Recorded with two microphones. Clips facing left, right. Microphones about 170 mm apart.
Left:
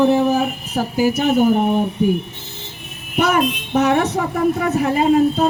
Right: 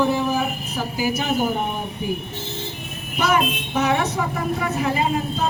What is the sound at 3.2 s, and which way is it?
Speech, 60° left (ahead or behind).